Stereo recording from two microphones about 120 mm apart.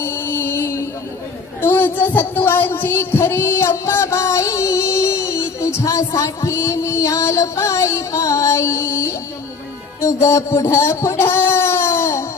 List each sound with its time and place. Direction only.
0.0 s music: 20° left (ahead or behind)
1.6 s child singing: 20° left (ahead or behind)
10.0 s speech: 25° left (ahead or behind)